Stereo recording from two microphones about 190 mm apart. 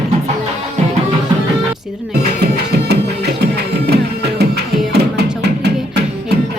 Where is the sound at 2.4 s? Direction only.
60° right (ahead or behind).